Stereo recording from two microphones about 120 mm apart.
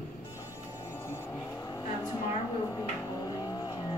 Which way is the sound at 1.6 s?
30° left (ahead or behind).